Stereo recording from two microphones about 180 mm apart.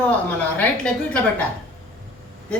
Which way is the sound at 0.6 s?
5° left (ahead or behind).